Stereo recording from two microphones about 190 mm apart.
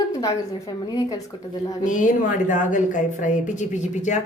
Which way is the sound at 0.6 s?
20° left (ahead or behind).